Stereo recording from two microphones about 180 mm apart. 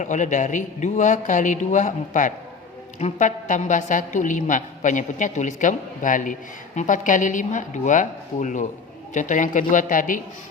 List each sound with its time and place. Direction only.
0.0 s a woman's voice: 45° left (ahead or behind)